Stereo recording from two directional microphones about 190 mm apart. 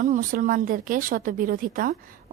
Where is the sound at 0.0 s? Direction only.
45° right (ahead or behind).